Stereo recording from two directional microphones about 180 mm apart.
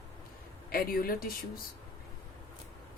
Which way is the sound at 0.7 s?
55° left (ahead or behind).